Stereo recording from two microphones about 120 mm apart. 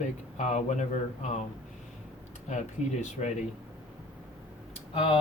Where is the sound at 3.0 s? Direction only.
75° left (ahead or behind).